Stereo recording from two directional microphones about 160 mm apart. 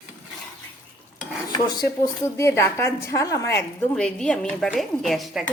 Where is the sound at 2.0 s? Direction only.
15° left (ahead or behind).